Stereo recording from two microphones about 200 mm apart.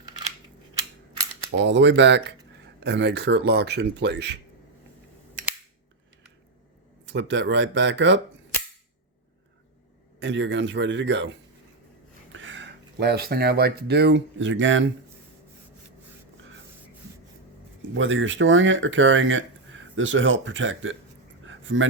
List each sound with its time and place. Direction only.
1.5 s speech: 60° right (ahead or behind)
7.0 s speech: 65° right (ahead or behind)
10.2 s speech: 65° right (ahead or behind)
17.9 s speech: 75° right (ahead or behind)
21.4 s a sound: 70° right (ahead or behind)